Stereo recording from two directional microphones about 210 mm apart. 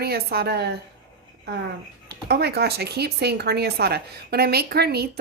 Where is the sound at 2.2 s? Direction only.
50° right (ahead or behind).